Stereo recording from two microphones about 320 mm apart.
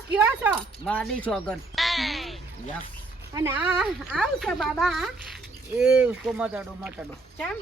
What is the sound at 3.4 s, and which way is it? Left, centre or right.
Speech, centre.